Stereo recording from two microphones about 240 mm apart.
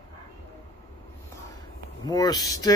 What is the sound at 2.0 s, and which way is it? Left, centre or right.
Speech, centre.